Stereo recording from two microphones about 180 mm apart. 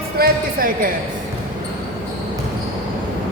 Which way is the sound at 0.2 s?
50° right (ahead or behind).